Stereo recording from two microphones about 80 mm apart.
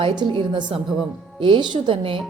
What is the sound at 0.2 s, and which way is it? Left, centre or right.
Speech, right.